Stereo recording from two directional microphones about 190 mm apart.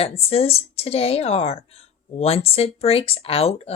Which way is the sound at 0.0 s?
30° left (ahead or behind).